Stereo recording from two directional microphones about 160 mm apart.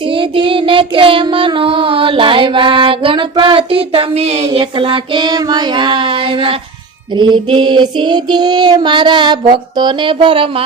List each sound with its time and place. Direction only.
0.0 s child singing: 30° right (ahead or behind)